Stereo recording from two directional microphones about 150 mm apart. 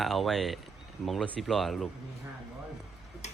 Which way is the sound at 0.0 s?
Centre (ahead or behind).